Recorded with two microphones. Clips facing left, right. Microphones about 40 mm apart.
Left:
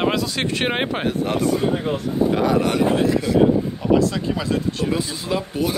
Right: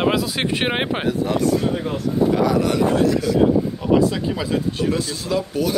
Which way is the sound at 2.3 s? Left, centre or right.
Left.